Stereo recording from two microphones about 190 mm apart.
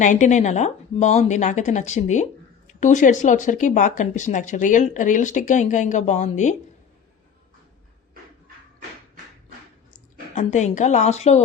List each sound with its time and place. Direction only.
0.0 s speech: 40° left (ahead or behind)
10.3 s speech: 40° left (ahead or behind)